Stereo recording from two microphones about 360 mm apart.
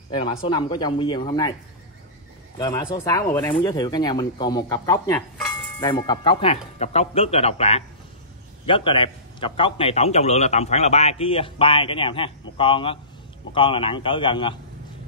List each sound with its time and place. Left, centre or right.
0.5 s speech: centre
2.6 s a man's voice: centre